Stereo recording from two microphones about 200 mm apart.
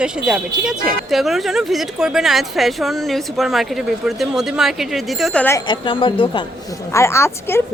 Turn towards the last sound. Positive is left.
turn(degrees=10)  # may be behind; listen again after turning